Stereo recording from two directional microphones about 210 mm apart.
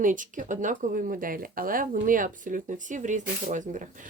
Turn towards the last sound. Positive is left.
turn(degrees=-35)  # may be behind; listen again after turning